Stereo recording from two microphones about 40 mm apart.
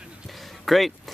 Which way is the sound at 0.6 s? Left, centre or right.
Centre.